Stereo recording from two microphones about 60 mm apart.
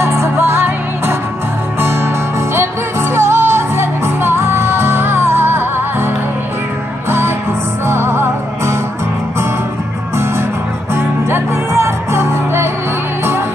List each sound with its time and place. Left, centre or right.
0.0 s music: right
10.1 s music: right